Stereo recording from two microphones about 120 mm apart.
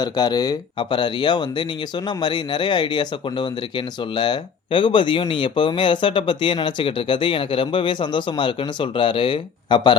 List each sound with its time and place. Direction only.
0.0 s speech: 35° left (ahead or behind)